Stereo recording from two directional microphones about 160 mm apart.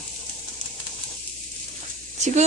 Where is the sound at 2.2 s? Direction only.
45° right (ahead or behind).